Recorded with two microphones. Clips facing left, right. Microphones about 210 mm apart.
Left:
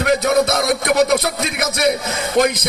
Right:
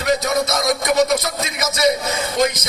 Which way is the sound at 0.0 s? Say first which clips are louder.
Left 4 dB; 60° left (ahead or behind).